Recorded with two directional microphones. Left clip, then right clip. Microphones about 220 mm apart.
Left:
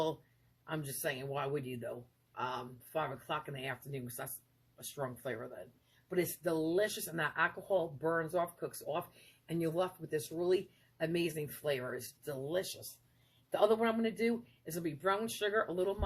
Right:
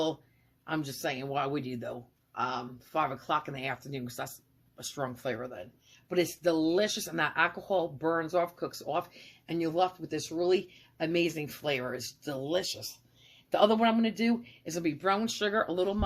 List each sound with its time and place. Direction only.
0.6 s speech: 30° right (ahead or behind)